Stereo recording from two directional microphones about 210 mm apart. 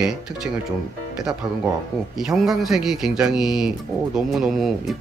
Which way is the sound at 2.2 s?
Centre (ahead or behind).